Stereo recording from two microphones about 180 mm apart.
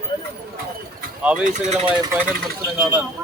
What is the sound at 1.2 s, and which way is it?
Speech, 5° right (ahead or behind).